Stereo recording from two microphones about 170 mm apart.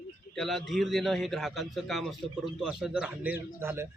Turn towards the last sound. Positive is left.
turn(degrees=-15)  # may be behind; listen again after turning